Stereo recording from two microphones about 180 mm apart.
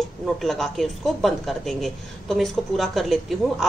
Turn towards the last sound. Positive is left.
turn(degrees=0)  # may be behind; listen again after turning